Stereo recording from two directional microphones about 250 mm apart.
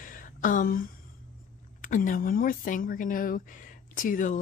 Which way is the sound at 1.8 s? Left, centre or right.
Left.